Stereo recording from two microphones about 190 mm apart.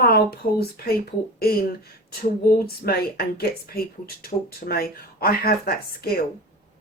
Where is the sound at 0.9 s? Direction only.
55° left (ahead or behind).